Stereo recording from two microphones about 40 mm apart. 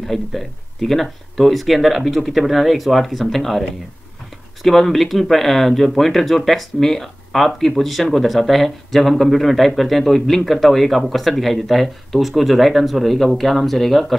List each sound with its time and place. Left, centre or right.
0.0 s speech: centre
4.6 s speech: centre